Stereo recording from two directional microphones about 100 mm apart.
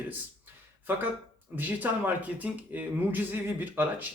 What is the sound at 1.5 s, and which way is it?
Speech, 15° right (ahead or behind).